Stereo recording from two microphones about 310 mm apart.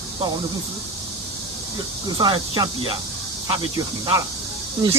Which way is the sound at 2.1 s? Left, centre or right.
Centre.